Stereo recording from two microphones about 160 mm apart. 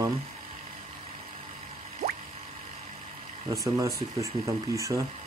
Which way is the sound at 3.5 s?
20° right (ahead or behind).